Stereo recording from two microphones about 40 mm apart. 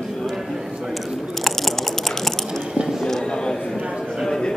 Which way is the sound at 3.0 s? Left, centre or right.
Centre.